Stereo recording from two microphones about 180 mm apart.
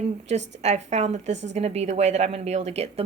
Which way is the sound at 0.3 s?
40° right (ahead or behind).